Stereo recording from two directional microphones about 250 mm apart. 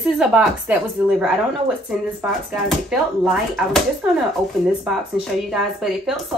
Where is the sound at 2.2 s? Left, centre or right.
Centre.